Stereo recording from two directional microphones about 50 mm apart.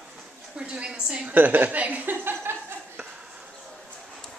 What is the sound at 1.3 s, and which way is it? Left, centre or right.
Speech, right.